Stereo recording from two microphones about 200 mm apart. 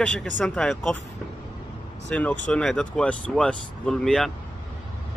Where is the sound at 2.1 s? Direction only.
5° left (ahead or behind).